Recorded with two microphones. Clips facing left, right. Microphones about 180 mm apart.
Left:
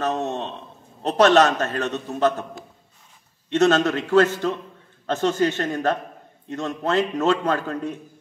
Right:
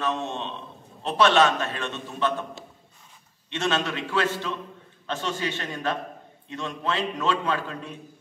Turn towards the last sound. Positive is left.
turn(degrees=45)  # may be behind; listen again after turning